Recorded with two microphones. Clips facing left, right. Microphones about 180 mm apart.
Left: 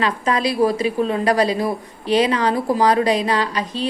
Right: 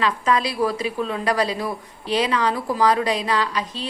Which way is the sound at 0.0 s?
40° left (ahead or behind).